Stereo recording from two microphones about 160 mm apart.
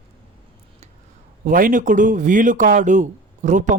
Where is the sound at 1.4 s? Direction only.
55° right (ahead or behind).